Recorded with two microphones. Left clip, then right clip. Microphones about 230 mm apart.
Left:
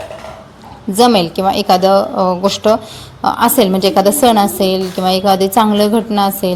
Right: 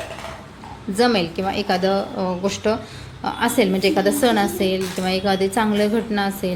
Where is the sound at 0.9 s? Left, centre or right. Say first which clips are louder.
Left 8 dB; left.